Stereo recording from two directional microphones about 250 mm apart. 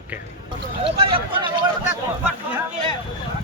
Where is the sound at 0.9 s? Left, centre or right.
Right.